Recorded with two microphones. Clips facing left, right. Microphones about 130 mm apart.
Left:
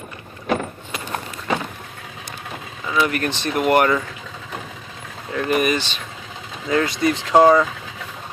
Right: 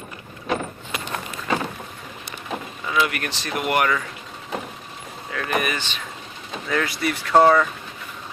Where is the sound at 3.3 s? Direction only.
55° left (ahead or behind).